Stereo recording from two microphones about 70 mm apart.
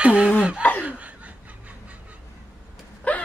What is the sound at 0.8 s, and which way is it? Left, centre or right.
Snicker, right.